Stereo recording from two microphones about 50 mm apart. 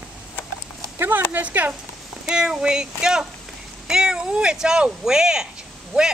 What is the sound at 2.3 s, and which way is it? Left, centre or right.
Speech, centre.